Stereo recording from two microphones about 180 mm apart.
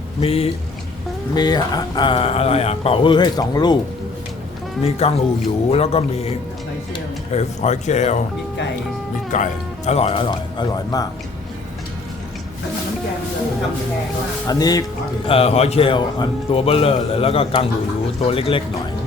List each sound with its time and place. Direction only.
0.2 s speech: 35° left (ahead or behind)
1.3 s speech: 25° left (ahead or behind)
4.8 s speech: 35° left (ahead or behind)
7.3 s speech: 40° left (ahead or behind)
9.3 s speech: 40° left (ahead or behind); by 11.0 s 25° left (ahead or behind)
14.4 s speech: 20° left (ahead or behind)
15.3 s speech: 35° left (ahead or behind)